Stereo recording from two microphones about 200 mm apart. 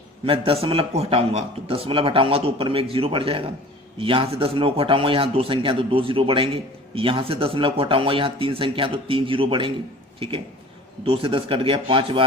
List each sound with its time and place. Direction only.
0.3 s a man's voice: 30° right (ahead or behind)
11.0 s a man's voice: 30° right (ahead or behind)